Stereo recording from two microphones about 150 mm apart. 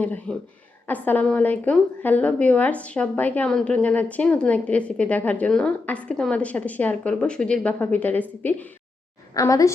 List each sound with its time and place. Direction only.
0.0 s a woman's voice: 10° left (ahead or behind)
9.3 s a woman's voice: 20° left (ahead or behind)